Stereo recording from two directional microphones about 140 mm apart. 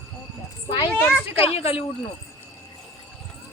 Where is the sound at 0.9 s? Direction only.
10° left (ahead or behind).